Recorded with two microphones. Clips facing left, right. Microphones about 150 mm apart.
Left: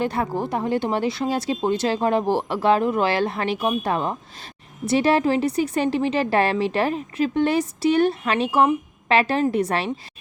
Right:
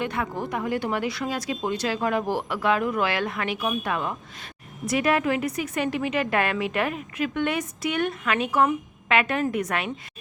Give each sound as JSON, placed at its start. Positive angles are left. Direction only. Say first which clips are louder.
{"t": 0.0, "sound": "a woman's voice", "louder": "left 5 dB", "side_deg": 35}